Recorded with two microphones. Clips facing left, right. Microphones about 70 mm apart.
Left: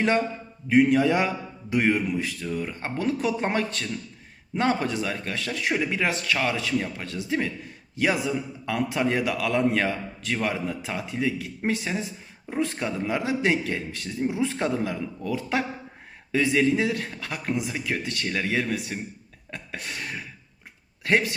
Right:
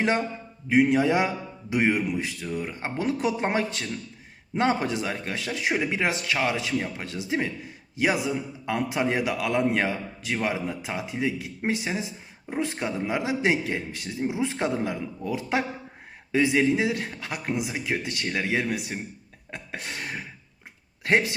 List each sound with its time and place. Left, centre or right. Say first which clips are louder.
0.7 s a man's voice: left 1 dB; centre
19.5 s a sound: even; right
21.0 s speech: even; right